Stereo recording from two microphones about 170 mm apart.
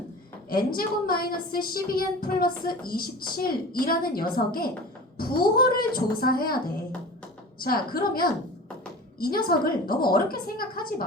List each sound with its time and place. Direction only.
0.5 s a woman's voice: 60° left (ahead or behind)
7.6 s a woman's voice: 60° left (ahead or behind)